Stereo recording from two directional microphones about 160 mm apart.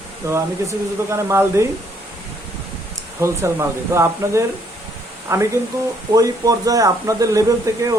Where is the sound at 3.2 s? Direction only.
15° right (ahead or behind).